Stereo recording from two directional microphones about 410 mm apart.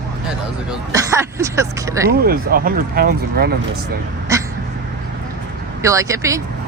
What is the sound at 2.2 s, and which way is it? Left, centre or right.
Speech, right.